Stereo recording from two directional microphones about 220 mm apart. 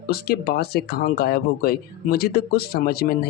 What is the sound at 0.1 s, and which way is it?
Speech, 45° left (ahead or behind).